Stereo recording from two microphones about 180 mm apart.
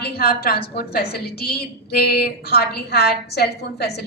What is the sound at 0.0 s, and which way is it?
A woman's voice, 55° left (ahead or behind).